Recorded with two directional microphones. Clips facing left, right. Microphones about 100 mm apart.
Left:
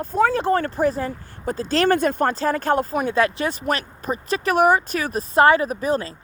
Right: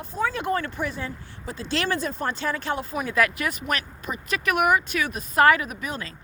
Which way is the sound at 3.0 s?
30° left (ahead or behind).